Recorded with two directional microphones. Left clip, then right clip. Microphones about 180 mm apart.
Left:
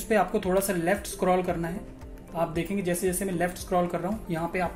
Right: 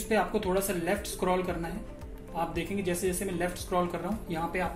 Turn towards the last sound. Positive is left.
turn(degrees=55)  # may be behind; listen again after turning